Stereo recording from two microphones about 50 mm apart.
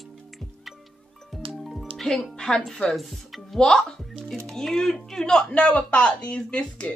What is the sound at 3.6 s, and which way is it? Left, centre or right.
Speech, centre.